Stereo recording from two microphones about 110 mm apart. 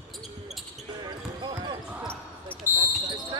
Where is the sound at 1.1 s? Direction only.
45° right (ahead or behind).